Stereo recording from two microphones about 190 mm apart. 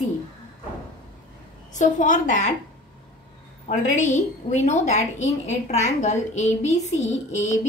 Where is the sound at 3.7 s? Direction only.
40° left (ahead or behind).